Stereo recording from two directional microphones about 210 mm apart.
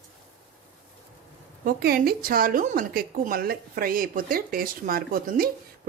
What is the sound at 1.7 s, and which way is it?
A woman's voice, 45° right (ahead or behind).